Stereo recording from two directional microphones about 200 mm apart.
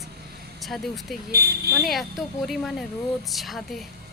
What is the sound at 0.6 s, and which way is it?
Speech, centre (ahead or behind).